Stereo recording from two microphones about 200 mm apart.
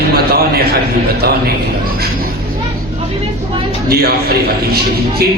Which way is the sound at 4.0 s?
50° right (ahead or behind).